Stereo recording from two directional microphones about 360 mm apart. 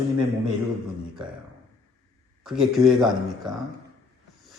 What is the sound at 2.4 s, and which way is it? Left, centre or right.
A man's voice, centre.